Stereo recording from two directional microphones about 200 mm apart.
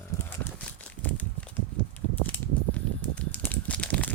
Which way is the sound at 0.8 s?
5° left (ahead or behind).